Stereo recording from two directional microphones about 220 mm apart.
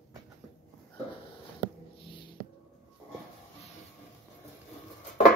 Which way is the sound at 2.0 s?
20° left (ahead or behind).